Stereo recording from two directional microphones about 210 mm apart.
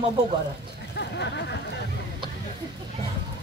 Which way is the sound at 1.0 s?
55° left (ahead or behind).